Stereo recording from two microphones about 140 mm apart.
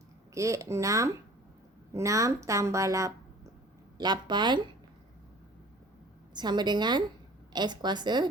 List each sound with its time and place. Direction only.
0.3 s a woman's voice: 20° right (ahead or behind)
6.3 s a woman's voice: 30° right (ahead or behind)